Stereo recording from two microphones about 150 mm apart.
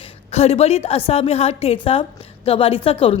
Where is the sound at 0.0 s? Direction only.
45° left (ahead or behind).